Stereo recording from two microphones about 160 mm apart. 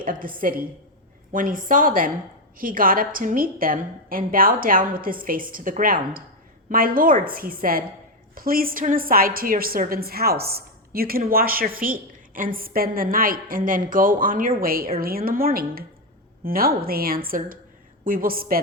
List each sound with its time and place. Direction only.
0.0 s a woman's voice: 60° right (ahead or behind)